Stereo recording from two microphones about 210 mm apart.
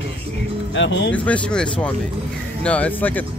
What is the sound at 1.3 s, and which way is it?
Speech, 5° left (ahead or behind).